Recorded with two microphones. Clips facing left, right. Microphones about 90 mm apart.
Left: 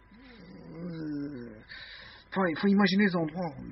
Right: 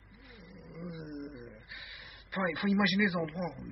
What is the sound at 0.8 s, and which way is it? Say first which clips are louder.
Roaring cats: left 8 dB; 30° left (ahead or behind).